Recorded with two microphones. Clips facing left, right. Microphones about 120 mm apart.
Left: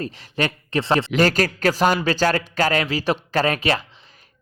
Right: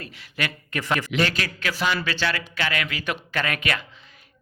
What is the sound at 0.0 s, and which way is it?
Speech, 35° left (ahead or behind).